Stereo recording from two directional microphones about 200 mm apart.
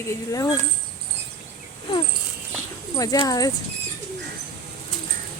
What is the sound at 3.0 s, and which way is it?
Speech, 20° left (ahead or behind).